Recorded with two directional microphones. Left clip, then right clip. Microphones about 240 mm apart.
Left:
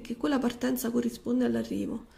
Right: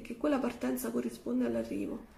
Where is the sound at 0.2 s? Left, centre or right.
Left.